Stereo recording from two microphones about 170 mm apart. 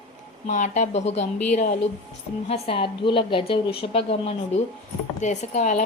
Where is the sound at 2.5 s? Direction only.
30° left (ahead or behind).